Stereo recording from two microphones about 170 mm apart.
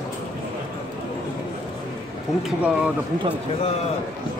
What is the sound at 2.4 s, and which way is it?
Speech, 5° right (ahead or behind).